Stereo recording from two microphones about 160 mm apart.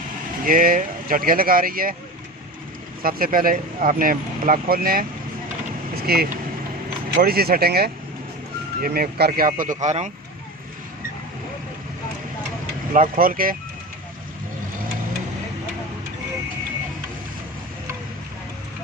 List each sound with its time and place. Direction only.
0.4 s speech: 60° right (ahead or behind)
3.0 s speech: 65° right (ahead or behind)
6.1 s speech: 75° right (ahead or behind); by 10.1 s 45° right (ahead or behind)
12.9 s speech: 60° right (ahead or behind)